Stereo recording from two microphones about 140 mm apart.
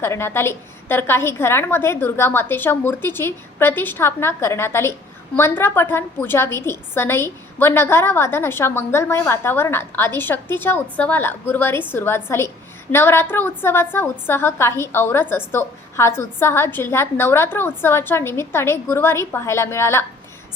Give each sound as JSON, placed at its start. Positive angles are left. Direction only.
{"t": 0.0, "sound": "a woman's voice", "side_deg": 20}